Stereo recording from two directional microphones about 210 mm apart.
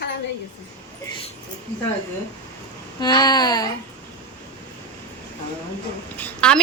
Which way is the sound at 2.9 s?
20° left (ahead or behind).